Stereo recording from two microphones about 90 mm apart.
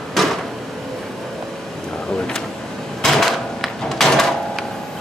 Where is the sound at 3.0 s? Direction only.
5° left (ahead or behind).